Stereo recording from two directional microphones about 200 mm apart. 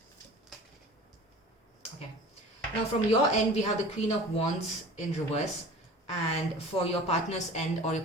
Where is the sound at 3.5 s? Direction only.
35° left (ahead or behind).